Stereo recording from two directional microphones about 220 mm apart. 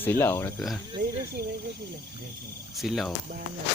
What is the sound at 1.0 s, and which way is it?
Speech, 45° right (ahead or behind).